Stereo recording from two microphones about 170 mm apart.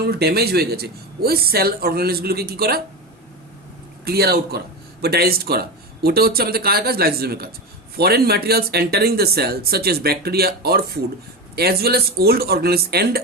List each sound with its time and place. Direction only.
0.0 s speech: 70° right (ahead or behind)
4.0 s speech: 65° right (ahead or behind)